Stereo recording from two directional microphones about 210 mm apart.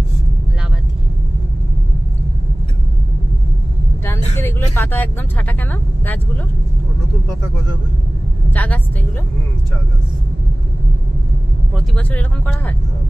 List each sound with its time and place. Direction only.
4.4 s vehicle: 10° left (ahead or behind)
4.7 s speech: 10° left (ahead or behind)
8.5 s speech: 5° left (ahead or behind)
11.7 s speech: 5° left (ahead or behind)